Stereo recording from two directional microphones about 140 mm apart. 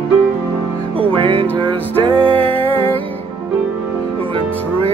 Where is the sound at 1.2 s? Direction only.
40° right (ahead or behind).